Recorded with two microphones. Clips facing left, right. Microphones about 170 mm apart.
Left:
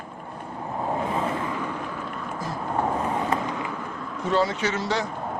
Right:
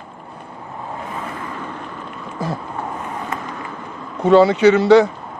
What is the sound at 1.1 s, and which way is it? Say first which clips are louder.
Vehicle: left 3 dB; 25° left (ahead or behind).